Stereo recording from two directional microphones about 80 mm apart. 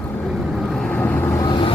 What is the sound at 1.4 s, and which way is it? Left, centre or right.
Vehicle, left.